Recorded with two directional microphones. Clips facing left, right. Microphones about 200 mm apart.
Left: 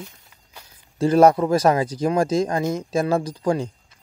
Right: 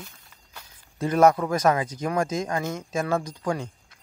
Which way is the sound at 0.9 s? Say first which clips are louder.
Left 4 dB; 30° left (ahead or behind).